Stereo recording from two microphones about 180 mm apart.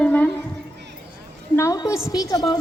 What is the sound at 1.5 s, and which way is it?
A woman's voice, 20° left (ahead or behind).